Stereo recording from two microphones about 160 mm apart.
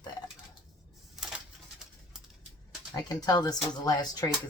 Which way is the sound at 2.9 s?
25° left (ahead or behind).